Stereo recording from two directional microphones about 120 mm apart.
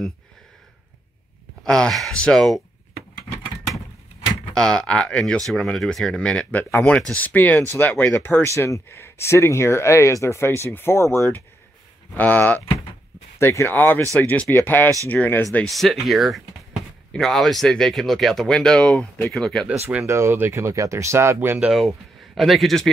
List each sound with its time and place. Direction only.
1.6 s speech: 5° left (ahead or behind)
4.6 s speech: 5° left (ahead or behind)
15.6 s speech: centre (ahead or behind)
19.9 s speech: 20° right (ahead or behind)
21.6 s speech: centre (ahead or behind)